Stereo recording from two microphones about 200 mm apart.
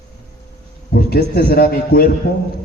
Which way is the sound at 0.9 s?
50° left (ahead or behind).